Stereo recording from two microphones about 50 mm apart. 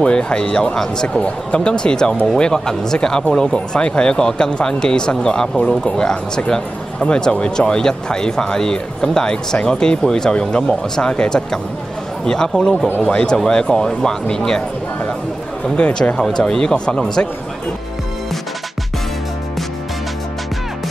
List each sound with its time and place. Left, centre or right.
0.0 s speech: centre
15.7 s speech: centre